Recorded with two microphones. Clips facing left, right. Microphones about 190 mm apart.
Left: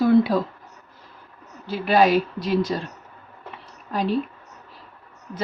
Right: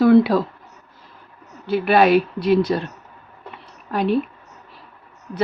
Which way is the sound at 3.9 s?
60° right (ahead or behind).